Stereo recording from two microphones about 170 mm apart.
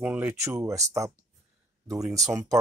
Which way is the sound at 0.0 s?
10° right (ahead or behind).